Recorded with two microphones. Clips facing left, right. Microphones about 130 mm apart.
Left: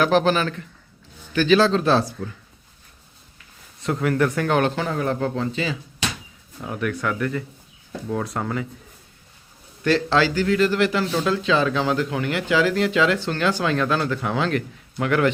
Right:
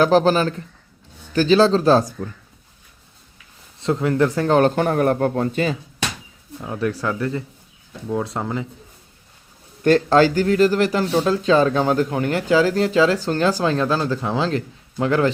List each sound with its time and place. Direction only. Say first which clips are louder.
0.0 s speech: right 3 dB; 35° right (ahead or behind)
3.8 s speech: right 3 dB; 25° right (ahead or behind); by 5.7 s 50° right (ahead or behind)
6.6 s speech: right 2 dB; 25° right (ahead or behind)
9.8 s speech: right 5 dB; 45° right (ahead or behind); by 15.3 s 30° right (ahead or behind)